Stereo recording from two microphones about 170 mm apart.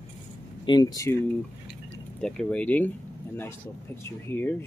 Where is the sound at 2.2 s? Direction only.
5° left (ahead or behind).